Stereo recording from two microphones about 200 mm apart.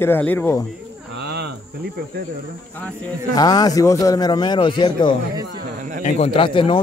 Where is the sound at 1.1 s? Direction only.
55° right (ahead or behind).